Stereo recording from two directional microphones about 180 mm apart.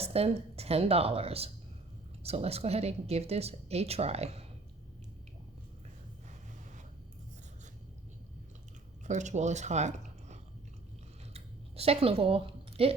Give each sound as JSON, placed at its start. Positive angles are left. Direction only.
{"t": 0.0, "sound": "speech", "side_deg": -35}
{"t": 9.0, "sound": "speech", "side_deg": -40}
{"t": 11.3, "sound": "a sound", "side_deg": -35}